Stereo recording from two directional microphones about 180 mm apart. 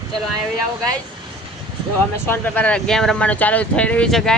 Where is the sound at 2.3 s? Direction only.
10° left (ahead or behind).